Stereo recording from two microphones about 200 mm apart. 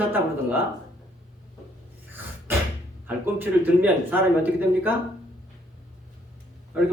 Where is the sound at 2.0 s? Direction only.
10° right (ahead or behind).